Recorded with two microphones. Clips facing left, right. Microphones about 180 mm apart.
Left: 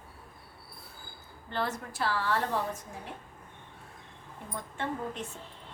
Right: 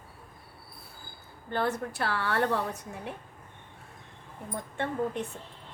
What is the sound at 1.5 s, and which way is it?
A woman's voice, 55° right (ahead or behind).